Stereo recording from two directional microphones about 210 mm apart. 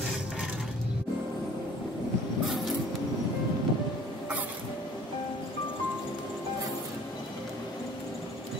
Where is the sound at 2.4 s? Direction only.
Centre (ahead or behind).